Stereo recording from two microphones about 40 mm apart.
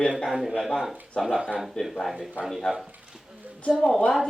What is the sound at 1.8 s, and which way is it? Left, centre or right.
Speech, centre.